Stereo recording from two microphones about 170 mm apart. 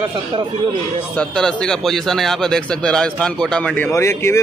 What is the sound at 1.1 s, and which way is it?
A man's voice, 5° left (ahead or behind).